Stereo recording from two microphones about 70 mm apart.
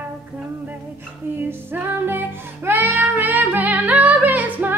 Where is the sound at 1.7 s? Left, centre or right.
Right.